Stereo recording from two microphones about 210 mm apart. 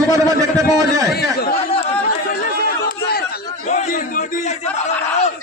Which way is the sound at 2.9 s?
45° left (ahead or behind).